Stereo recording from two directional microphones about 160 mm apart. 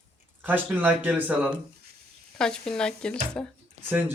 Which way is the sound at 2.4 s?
5° left (ahead or behind).